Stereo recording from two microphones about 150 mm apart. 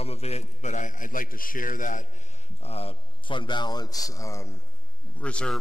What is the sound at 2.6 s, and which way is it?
Speech, 40° left (ahead or behind).